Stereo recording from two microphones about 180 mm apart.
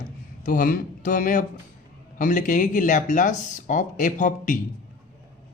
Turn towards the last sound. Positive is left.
turn(degrees=45)  # may be behind; listen again after turning